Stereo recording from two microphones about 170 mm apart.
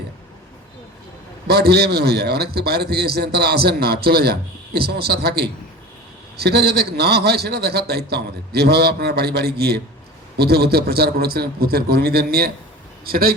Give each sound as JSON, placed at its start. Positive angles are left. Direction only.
{"t": 1.5, "sound": "a man's voice", "side_deg": -70}